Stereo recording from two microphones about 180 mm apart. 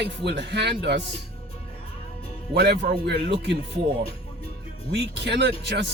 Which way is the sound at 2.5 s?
65° right (ahead or behind).